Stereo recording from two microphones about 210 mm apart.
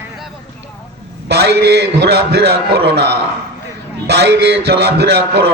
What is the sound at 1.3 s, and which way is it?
A man's voice, 50° right (ahead or behind).